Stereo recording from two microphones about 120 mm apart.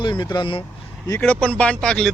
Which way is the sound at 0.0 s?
40° left (ahead or behind).